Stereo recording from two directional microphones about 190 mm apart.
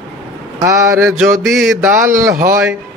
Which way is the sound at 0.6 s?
15° right (ahead or behind).